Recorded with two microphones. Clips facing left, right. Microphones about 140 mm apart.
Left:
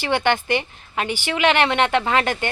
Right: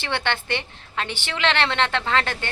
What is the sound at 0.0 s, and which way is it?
A woman's voice, 15° left (ahead or behind).